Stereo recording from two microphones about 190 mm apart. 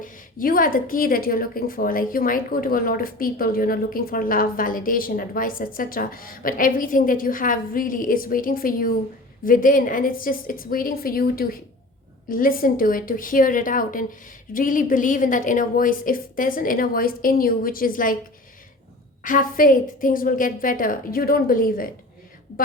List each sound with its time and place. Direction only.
0.0 s speech: 45° left (ahead or behind)
19.2 s speech: 45° left (ahead or behind)